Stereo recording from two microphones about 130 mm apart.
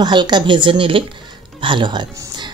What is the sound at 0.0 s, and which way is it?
Speech, 35° right (ahead or behind).